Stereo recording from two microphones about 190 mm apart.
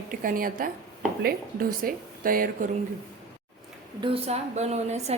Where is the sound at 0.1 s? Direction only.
45° right (ahead or behind).